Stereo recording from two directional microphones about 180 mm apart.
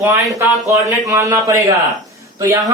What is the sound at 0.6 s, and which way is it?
Speech, 20° right (ahead or behind).